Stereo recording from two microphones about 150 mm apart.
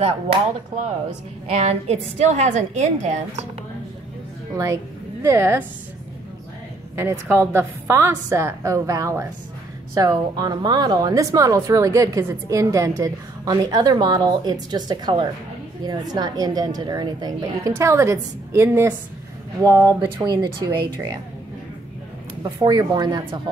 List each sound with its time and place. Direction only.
1.5 s a woman's voice: 45° right (ahead or behind)
5.2 s a woman's voice: 15° right (ahead or behind)
7.0 s a woman's voice: 15° right (ahead or behind)
22.7 s speech: 25° right (ahead or behind)